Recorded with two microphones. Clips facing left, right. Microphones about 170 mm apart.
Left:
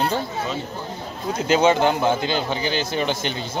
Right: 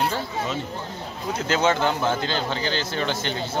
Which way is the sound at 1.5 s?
15° left (ahead or behind).